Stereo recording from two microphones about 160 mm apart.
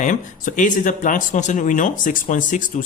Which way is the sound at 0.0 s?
55° left (ahead or behind).